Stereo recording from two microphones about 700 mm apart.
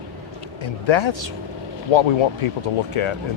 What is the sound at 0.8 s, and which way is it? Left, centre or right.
Speech, left.